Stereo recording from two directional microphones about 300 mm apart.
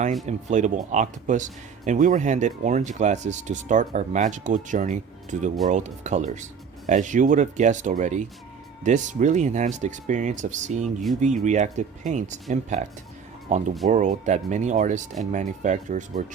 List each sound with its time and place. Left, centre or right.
0.3 s speech: right